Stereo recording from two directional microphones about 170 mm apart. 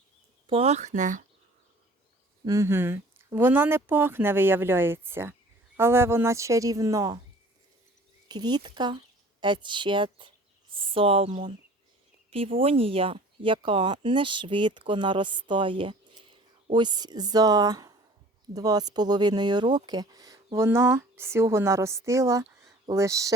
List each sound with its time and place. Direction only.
0.4 s speech: 35° right (ahead or behind)
2.4 s speech: 20° right (ahead or behind)
8.3 s speech: 25° right (ahead or behind)